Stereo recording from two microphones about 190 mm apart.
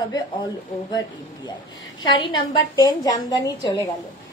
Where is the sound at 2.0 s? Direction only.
25° left (ahead or behind).